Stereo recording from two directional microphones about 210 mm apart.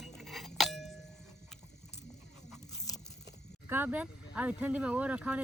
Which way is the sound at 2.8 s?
15° left (ahead or behind).